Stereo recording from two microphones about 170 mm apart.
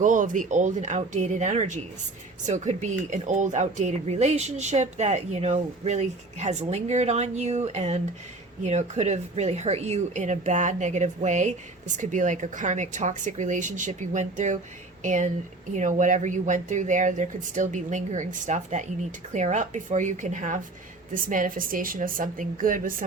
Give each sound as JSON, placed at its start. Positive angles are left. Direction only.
{"t": 0.0, "sound": "speech", "side_deg": -50}